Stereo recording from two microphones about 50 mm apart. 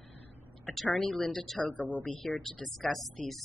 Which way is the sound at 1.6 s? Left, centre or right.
Left.